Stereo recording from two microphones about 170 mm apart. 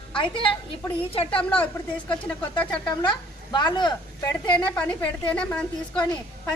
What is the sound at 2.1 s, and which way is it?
Speech, 5° left (ahead or behind).